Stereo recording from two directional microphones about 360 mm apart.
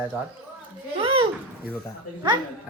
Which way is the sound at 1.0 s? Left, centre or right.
Centre.